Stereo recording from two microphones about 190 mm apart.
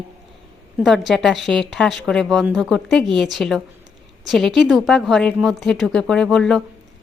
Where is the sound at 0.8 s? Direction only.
Centre (ahead or behind).